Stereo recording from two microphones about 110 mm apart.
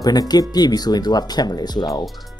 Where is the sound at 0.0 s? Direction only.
35° left (ahead or behind).